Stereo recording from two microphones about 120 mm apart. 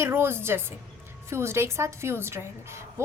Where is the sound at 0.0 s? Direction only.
20° right (ahead or behind).